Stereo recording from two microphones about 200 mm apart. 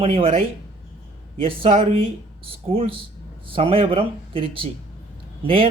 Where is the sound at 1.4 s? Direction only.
25° right (ahead or behind).